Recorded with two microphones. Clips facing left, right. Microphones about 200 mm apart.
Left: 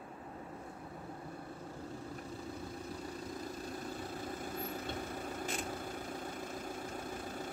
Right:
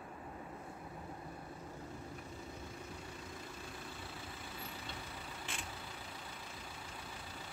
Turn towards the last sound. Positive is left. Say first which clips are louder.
# left 9 dB
turn(degrees=50)  # may be behind; listen again after turning